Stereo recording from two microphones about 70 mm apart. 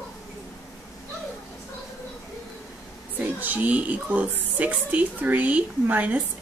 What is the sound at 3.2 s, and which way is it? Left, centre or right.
Speech, right.